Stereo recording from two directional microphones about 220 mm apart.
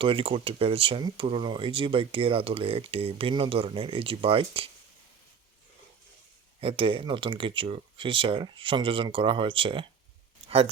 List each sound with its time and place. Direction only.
0.0 s speech: 25° right (ahead or behind)
6.6 s speech: 25° right (ahead or behind)